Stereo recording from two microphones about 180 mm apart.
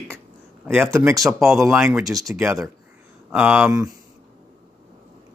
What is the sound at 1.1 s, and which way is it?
Speech, centre (ahead or behind).